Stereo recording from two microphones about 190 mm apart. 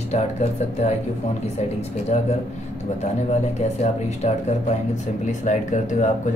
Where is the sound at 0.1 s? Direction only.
35° left (ahead or behind).